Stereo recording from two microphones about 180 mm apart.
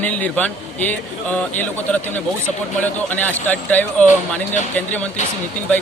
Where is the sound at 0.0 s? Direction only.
10° left (ahead or behind).